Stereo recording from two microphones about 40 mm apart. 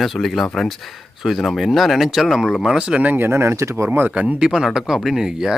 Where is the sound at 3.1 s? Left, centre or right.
Right.